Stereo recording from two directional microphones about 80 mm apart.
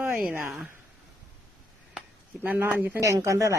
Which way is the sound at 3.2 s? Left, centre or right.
Right.